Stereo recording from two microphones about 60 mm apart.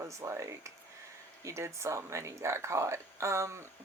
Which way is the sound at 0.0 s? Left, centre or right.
Right.